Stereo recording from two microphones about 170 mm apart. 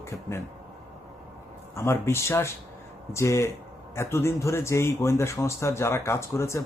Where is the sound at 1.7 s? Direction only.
15° left (ahead or behind).